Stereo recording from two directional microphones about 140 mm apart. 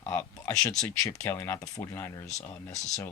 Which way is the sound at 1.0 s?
20° left (ahead or behind).